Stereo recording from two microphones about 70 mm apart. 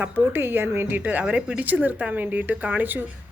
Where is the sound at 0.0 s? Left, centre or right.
Right.